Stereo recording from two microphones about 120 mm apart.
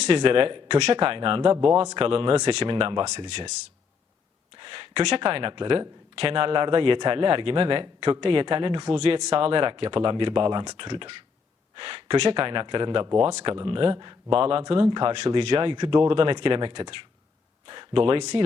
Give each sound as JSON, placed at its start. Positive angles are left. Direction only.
{"t": 0.0, "sound": "a man's voice", "side_deg": -50}
{"t": 4.5, "sound": "a man's voice", "side_deg": -45}
{"t": 14.3, "sound": "a man's voice", "side_deg": -55}